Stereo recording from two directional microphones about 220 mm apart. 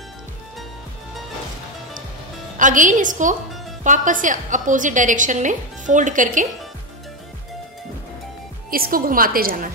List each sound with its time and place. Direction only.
2.5 s a woman's voice: 35° right (ahead or behind)
8.6 s a woman's voice: 40° right (ahead or behind)